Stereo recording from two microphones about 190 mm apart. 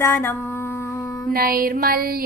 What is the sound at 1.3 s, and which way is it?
Female singing, 50° right (ahead or behind).